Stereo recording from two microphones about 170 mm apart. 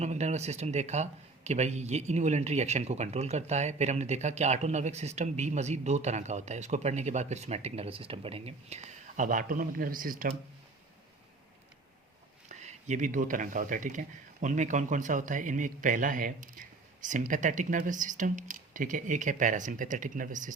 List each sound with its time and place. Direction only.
0.0 s speech: 40° right (ahead or behind)
12.5 s a man's voice: 45° right (ahead or behind)